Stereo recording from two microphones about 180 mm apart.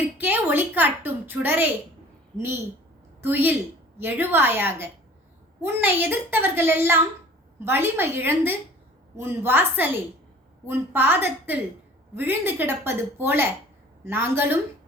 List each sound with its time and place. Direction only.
0.2 s a woman's voice: 10° right (ahead or behind)
3.2 s a woman's voice: 10° right (ahead or behind)